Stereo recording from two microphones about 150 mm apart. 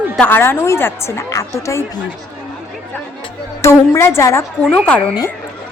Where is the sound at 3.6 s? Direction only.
20° left (ahead or behind).